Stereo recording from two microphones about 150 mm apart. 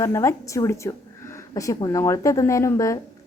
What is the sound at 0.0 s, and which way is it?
A woman's voice, 20° left (ahead or behind).